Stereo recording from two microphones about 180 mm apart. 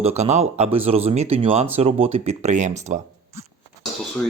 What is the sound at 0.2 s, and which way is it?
Speech, 40° right (ahead or behind).